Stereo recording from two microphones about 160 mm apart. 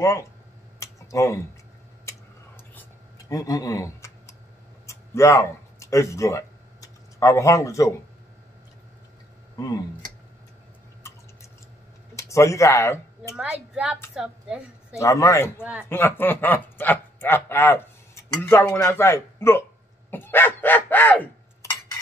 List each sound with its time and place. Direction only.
0.7 s a sound: 20° left (ahead or behind)
3.3 s speech: 20° left (ahead or behind)
4.8 s a sound: 20° left (ahead or behind)
12.2 s speech: 20° left (ahead or behind)
13.4 s a woman's voice: 5° right (ahead or behind)
15.0 s a man's voice: 20° left (ahead or behind)
15.6 s a woman's voice: 5° right (ahead or behind)
16.2 s speech: 10° left (ahead or behind)
20.1 s a sound: 15° left (ahead or behind)